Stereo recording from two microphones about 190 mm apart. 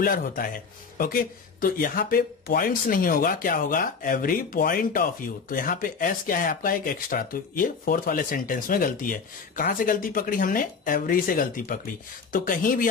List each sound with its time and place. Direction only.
0.0 s speech: 50° left (ahead or behind)